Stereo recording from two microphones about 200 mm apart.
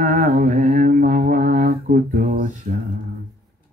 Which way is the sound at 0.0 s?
40° right (ahead or behind).